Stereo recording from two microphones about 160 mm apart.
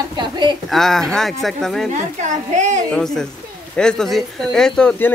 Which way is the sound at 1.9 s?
50° right (ahead or behind).